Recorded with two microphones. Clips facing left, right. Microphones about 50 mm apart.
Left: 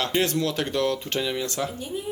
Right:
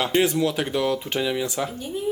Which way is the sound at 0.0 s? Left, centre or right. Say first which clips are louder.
Right 3 dB; centre.